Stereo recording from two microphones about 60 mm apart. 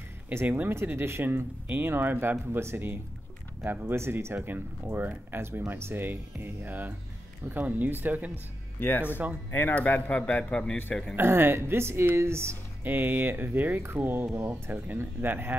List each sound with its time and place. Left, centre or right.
0.3 s speech: right
8.7 s a man's voice: left; by 10.8 s centre
11.1 s a woman's voice: right
12.8 s a woman's voice: right
14.5 s speech: right